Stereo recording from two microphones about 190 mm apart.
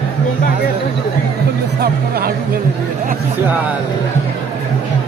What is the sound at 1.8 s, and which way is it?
Speech, 55° right (ahead or behind).